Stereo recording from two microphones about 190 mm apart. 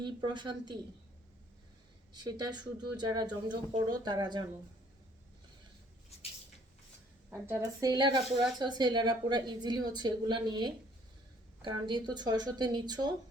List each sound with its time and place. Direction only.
0.0 s speech: 25° right (ahead or behind)
2.2 s speech: 20° right (ahead or behind)
7.3 s speech: 10° right (ahead or behind)